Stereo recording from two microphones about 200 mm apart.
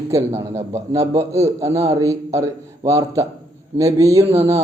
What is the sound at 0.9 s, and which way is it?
A man's voice, 15° right (ahead or behind).